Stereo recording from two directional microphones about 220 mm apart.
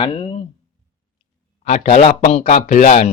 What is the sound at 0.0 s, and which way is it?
Speech, 25° left (ahead or behind).